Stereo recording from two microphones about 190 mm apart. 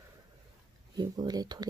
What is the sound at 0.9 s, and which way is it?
Speech, 20° right (ahead or behind).